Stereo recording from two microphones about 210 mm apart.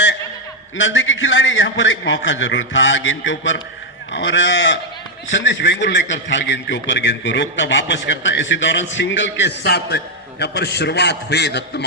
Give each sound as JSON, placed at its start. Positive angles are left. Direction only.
{"t": 0.8, "sound": "a man's voice", "side_deg": 65}